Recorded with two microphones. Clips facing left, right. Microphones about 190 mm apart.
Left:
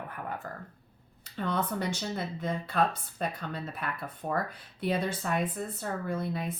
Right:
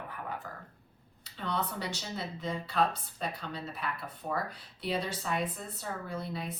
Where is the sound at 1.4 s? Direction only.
50° left (ahead or behind).